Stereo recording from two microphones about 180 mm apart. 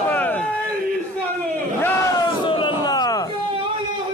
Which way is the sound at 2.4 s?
25° left (ahead or behind).